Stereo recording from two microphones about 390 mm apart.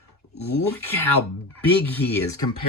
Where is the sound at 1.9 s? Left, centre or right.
Centre.